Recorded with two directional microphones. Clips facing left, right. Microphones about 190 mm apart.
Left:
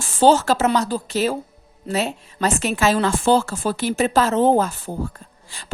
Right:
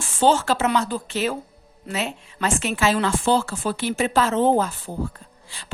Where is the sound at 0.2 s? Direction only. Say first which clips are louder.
Left 4 dB; 40° left (ahead or behind).